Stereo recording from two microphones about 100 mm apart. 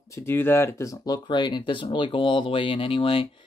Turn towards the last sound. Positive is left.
turn(degrees=65)  # may be behind; listen again after turning